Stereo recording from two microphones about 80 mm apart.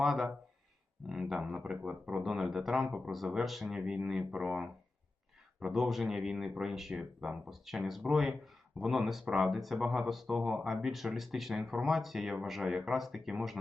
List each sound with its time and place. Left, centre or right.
0.0 s speech: centre